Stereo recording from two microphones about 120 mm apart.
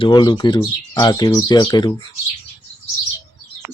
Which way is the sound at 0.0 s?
35° left (ahead or behind).